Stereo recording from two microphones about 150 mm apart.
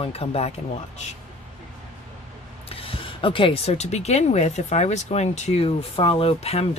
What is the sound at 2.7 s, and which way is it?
Speech, 40° left (ahead or behind).